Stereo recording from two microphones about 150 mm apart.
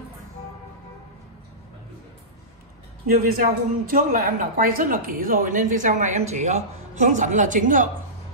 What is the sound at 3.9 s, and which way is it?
Speech, 70° right (ahead or behind).